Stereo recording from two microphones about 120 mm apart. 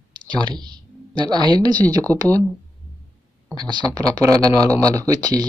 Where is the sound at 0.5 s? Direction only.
40° right (ahead or behind).